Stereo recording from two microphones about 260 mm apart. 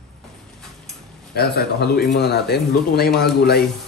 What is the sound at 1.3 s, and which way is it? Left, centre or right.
Speech, left.